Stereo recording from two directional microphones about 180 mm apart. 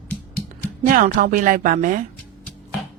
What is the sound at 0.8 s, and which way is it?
Speech, 50° right (ahead or behind).